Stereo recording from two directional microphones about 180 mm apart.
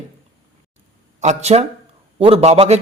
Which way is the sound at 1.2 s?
40° right (ahead or behind).